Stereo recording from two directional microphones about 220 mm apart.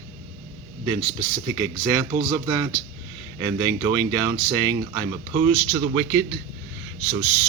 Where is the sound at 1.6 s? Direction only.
15° right (ahead or behind).